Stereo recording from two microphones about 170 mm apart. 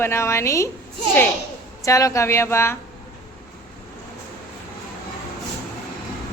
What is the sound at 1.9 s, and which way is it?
Speech, 20° left (ahead or behind).